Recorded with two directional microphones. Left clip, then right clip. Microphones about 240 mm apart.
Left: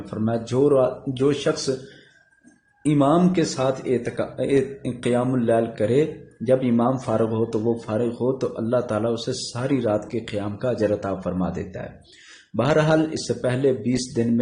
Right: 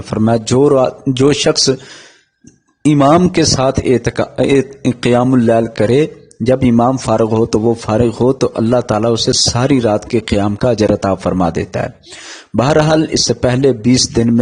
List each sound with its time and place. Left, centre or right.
0.1 s speech: right
2.8 s speech: right